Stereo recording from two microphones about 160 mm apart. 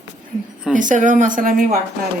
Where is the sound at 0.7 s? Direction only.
55° right (ahead or behind).